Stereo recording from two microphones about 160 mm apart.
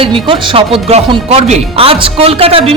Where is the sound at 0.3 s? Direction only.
35° right (ahead or behind).